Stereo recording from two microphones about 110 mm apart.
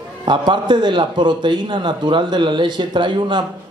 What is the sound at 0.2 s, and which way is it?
A man's voice, 45° right (ahead or behind).